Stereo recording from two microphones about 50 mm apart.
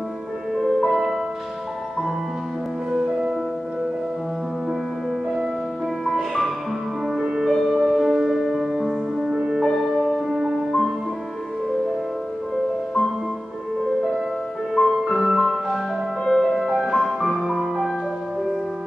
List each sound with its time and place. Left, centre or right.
0.9 s music: centre
3.0 s music: centre
6.0 s music: centre
7.4 s music: centre
9.6 s music: centre
10.0 s music: centre
14.7 s music: centre
16.3 s music: centre